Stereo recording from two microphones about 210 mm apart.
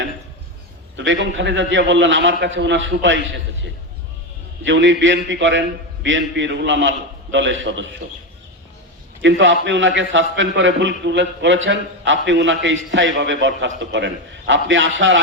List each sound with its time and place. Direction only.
0.9 s a man's voice: 60° right (ahead or behind)
4.6 s a man's voice: 65° right (ahead or behind)
9.2 s a man's voice: 65° right (ahead or behind)